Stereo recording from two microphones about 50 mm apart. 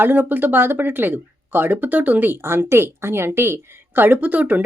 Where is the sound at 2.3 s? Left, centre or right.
Right.